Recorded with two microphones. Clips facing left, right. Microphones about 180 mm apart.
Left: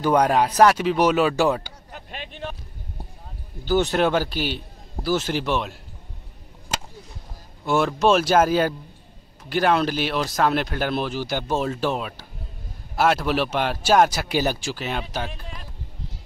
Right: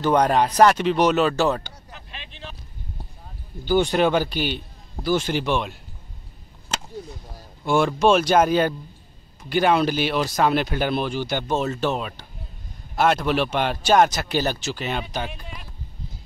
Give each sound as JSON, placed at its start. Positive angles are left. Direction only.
{"t": 0.0, "sound": "speech", "side_deg": 10}
{"t": 1.9, "sound": "vehicle", "side_deg": 50}
{"t": 3.6, "sound": "speech", "side_deg": 0}
{"t": 7.6, "sound": "speech", "side_deg": 0}